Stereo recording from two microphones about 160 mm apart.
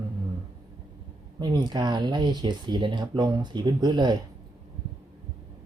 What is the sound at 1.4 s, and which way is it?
Speech, 25° right (ahead or behind).